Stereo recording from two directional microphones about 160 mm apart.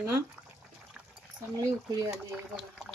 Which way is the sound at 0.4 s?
5° right (ahead or behind).